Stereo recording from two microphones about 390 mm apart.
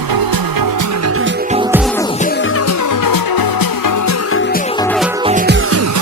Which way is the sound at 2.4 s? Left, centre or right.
Left.